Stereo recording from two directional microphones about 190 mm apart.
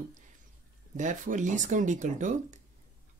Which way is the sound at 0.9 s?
40° right (ahead or behind).